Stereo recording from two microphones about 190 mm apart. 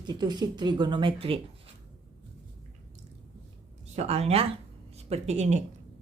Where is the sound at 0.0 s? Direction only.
20° right (ahead or behind).